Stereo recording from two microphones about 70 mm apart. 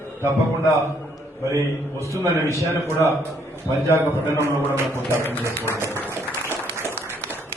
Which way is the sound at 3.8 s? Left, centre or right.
Right.